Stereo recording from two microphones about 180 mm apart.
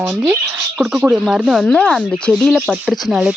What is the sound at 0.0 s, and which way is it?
Speech, 5° right (ahead or behind).